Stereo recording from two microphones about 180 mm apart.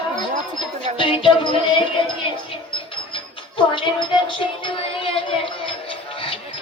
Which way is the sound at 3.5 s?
25° left (ahead or behind).